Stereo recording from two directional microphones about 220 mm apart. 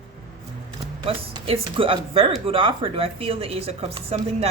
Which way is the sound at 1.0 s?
25° right (ahead or behind).